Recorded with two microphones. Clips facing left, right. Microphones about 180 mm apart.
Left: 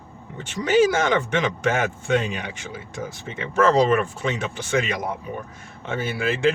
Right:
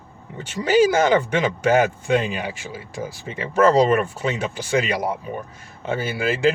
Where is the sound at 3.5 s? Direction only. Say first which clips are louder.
Right 2 dB; 35° right (ahead or behind).